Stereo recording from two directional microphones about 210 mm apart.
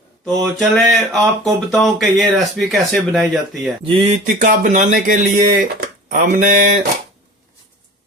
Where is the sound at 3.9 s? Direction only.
30° right (ahead or behind).